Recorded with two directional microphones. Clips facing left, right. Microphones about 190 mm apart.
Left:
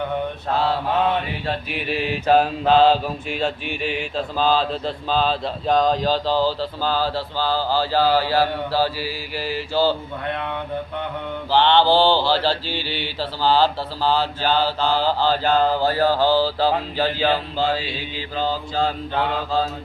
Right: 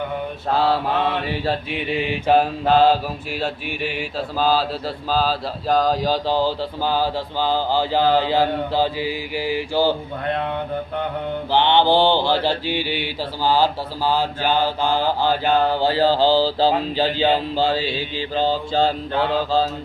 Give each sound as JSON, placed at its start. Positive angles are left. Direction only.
{"t": 1.5, "sound": "speech", "side_deg": -25}
{"t": 2.2, "sound": "speech", "side_deg": -10}
{"t": 11.5, "sound": "speech", "side_deg": -15}
{"t": 15.9, "sound": "speech", "side_deg": -25}